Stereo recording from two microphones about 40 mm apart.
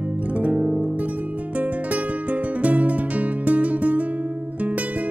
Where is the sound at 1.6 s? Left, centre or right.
Right.